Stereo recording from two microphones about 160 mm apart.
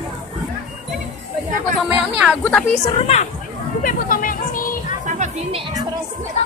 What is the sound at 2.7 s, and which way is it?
Speech, 45° left (ahead or behind).